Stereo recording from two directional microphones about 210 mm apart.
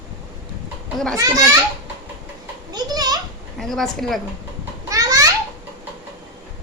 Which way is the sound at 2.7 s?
20° right (ahead or behind).